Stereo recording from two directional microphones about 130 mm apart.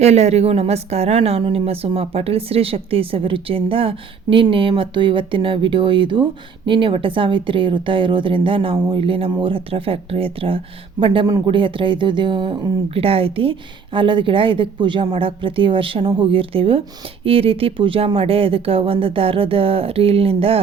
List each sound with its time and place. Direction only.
0.0 s a woman's voice: 55° right (ahead or behind)